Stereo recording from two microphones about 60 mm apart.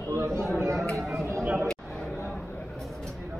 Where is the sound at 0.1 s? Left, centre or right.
Right.